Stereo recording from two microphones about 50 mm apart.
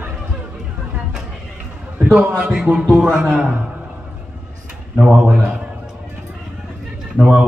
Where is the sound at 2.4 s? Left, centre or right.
Right.